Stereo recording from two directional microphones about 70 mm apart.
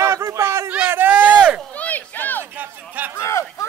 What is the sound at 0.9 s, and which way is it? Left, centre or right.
Speech, right.